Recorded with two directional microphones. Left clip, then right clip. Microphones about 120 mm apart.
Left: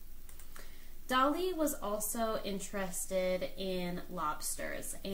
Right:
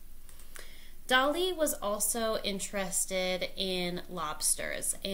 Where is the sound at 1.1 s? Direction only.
15° right (ahead or behind).